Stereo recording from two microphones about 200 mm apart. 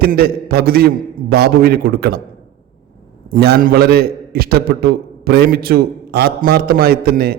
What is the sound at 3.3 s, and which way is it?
A man's voice, 50° right (ahead or behind).